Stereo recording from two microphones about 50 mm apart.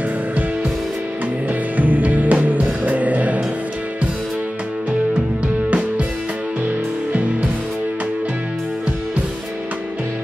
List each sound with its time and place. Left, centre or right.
1.8 s music: right
5.7 s music: right